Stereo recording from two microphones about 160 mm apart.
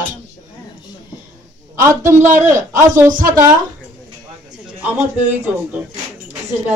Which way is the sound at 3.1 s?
55° right (ahead or behind).